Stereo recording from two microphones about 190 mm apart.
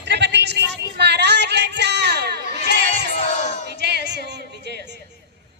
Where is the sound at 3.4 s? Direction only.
40° left (ahead or behind).